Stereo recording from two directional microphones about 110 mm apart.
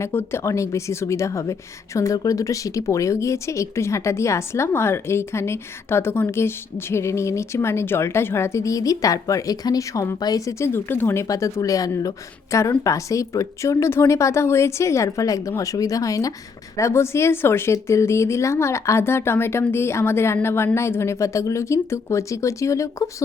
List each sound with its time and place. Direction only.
0.0 s a woman's voice: 20° left (ahead or behind)